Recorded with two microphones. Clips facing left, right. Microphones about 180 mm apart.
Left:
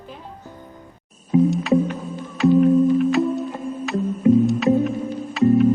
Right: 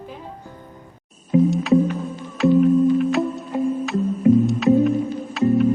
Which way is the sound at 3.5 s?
15° right (ahead or behind).